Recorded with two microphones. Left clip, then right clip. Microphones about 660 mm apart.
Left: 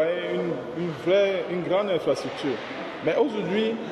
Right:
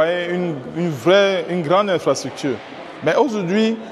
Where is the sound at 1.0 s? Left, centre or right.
Right.